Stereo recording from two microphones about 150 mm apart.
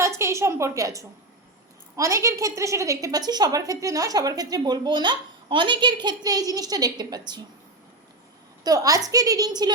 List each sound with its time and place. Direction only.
0.2 s a woman's voice: 20° right (ahead or behind)
8.6 s a woman's voice: 25° right (ahead or behind)